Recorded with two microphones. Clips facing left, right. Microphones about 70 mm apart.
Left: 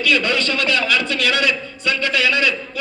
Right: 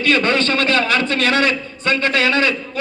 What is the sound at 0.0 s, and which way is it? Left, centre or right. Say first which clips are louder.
A man's voice: right 2 dB; right.